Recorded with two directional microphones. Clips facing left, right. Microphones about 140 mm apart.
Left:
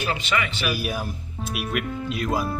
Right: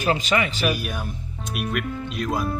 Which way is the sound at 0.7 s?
5° left (ahead or behind).